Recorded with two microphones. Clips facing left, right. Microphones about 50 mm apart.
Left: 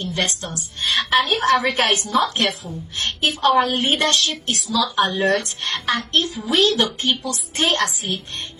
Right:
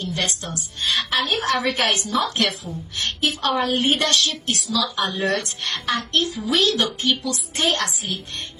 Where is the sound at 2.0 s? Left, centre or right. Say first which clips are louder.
Left 2 dB; left.